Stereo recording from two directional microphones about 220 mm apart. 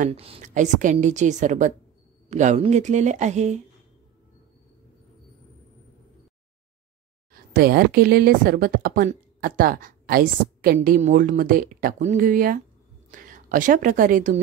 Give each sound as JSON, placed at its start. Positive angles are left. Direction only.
{"t": 0.0, "sound": "a woman's voice", "side_deg": -25}
{"t": 7.5, "sound": "a woman's voice", "side_deg": -40}